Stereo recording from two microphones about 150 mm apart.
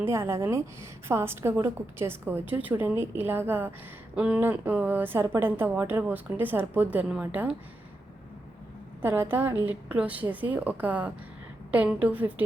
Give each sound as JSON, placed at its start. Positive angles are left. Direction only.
{"t": 0.0, "sound": "a woman's voice", "side_deg": -15}
{"t": 9.0, "sound": "a woman's voice", "side_deg": -15}